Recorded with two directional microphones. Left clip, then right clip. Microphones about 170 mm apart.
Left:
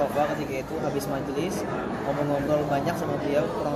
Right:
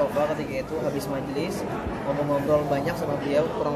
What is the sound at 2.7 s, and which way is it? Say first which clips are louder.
Speech: even; 5° right (ahead or behind).